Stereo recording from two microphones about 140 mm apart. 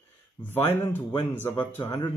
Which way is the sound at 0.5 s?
15° left (ahead or behind).